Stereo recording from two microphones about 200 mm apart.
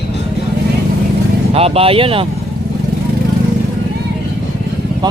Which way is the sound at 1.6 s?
30° right (ahead or behind).